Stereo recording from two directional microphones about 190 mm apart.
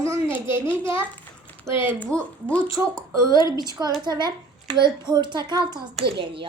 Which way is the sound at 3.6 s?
20° right (ahead or behind).